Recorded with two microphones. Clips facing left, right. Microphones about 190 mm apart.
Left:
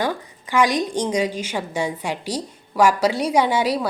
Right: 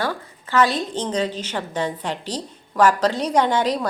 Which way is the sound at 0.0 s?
15° left (ahead or behind).